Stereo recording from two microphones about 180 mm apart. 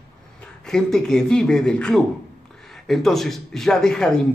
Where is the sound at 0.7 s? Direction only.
5° left (ahead or behind).